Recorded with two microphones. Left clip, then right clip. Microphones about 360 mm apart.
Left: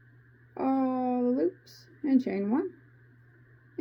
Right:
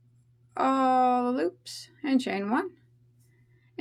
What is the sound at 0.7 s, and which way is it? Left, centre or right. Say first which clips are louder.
Speech: right 6 dB; right.